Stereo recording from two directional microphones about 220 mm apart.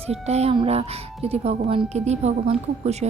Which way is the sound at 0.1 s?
30° right (ahead or behind).